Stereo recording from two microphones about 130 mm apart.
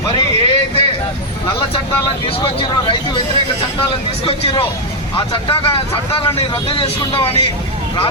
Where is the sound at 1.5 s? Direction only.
45° left (ahead or behind).